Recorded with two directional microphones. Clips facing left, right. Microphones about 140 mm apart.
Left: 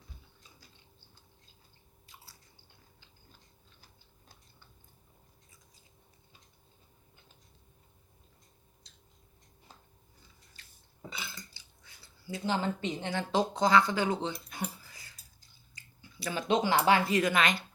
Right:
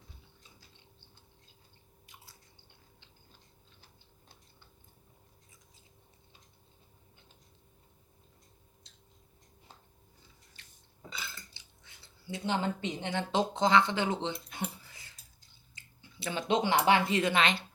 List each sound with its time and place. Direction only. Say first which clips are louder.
11.5 s speech: even; 20° right (ahead or behind)
15.7 s a sound: left 1 dB; 25° right (ahead or behind)
17.1 s a woman's voice: left 1 dB; 25° right (ahead or behind)